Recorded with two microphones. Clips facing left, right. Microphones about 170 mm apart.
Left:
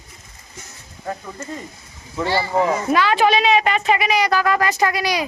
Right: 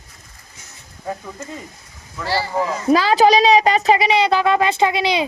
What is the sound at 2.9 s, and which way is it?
Speech, 35° right (ahead or behind).